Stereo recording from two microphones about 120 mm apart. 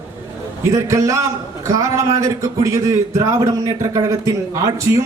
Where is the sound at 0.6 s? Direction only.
25° right (ahead or behind).